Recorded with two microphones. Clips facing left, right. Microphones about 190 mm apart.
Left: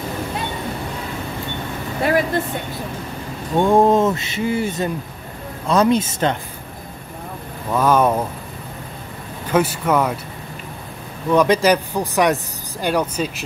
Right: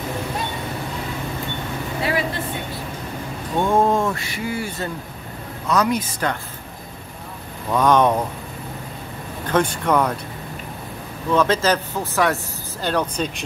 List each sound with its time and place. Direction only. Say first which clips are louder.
2.0 s speech: left 6 dB; 45° left (ahead or behind)
3.5 s speech: left 4 dB; 15° left (ahead or behind)
7.7 s speech: even; 5° left (ahead or behind)
9.5 s speech: left 1 dB; 5° left (ahead or behind)
11.3 s speech: left 4 dB; 15° left (ahead or behind)